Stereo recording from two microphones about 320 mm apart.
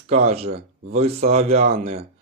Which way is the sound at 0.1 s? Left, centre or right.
Right.